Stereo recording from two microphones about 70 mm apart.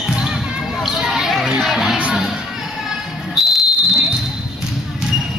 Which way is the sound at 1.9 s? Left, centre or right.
Centre.